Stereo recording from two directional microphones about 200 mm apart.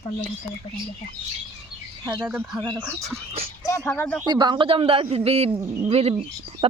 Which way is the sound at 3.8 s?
10° left (ahead or behind).